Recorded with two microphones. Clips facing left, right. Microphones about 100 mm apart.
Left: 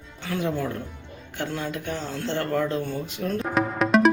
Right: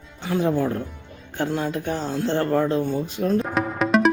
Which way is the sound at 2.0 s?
25° right (ahead or behind).